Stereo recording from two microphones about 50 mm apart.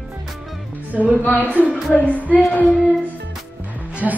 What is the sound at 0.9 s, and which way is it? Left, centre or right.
Speech, right.